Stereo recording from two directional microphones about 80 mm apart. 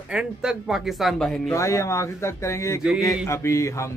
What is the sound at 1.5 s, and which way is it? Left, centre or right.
Speech, left.